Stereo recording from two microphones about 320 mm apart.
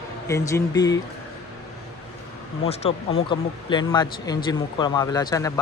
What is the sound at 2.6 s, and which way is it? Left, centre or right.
Speech, centre.